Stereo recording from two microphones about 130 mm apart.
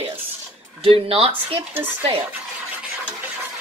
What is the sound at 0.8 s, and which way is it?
Speech, 45° right (ahead or behind).